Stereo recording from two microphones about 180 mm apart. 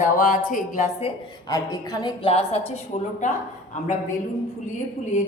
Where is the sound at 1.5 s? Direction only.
20° left (ahead or behind).